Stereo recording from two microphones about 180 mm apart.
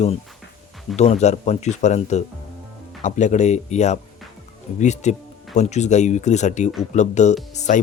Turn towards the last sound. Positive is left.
turn(degrees=40)  # may be behind; listen again after turning